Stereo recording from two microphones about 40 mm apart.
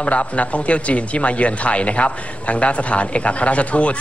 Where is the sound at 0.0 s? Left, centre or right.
Left.